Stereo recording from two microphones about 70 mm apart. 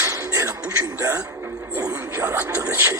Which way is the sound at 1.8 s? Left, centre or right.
Right.